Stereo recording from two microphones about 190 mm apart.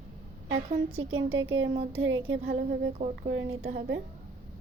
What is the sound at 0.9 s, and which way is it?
A woman's voice, 90° right.